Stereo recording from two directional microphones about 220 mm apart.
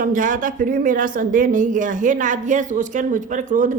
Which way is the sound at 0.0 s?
35° right (ahead or behind).